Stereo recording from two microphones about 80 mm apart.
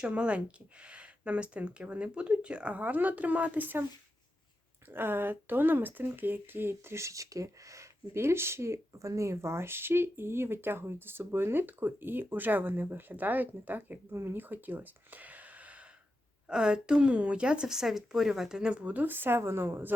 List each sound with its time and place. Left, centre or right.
0.0 s speech: centre
4.9 s speech: right